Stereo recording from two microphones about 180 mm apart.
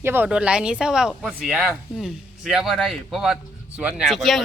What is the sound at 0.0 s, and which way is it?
A man's voice, 10° right (ahead or behind).